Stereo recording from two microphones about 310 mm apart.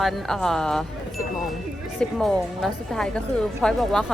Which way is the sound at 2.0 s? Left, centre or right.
Centre.